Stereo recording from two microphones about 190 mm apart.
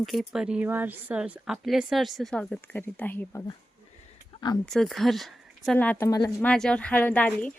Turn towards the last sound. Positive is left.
turn(degrees=5)  # may be behind; listen again after turning